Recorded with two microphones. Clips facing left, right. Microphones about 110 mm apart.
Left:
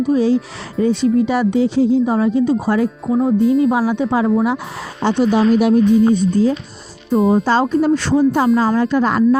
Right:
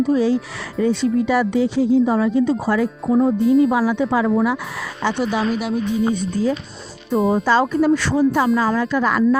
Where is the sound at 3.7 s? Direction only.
25° left (ahead or behind).